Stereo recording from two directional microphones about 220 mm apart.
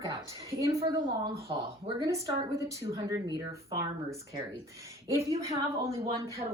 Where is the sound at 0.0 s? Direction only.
15° right (ahead or behind).